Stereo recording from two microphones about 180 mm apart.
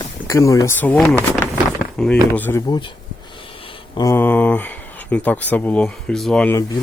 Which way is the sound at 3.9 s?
15° left (ahead or behind).